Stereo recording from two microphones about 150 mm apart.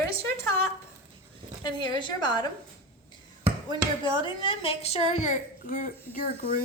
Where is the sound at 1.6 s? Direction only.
30° left (ahead or behind).